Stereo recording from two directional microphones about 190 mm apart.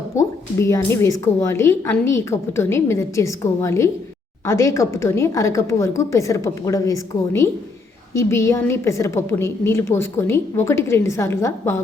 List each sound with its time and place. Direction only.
0.2 s a woman's voice: 15° left (ahead or behind)